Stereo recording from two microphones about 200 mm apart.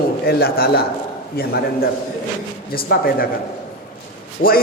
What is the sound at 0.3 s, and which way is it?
A man's voice, 50° left (ahead or behind).